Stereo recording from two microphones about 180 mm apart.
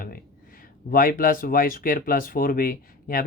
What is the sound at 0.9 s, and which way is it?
Speech, 50° left (ahead or behind).